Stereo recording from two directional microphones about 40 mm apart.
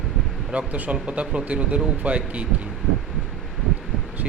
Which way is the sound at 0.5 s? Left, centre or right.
Right.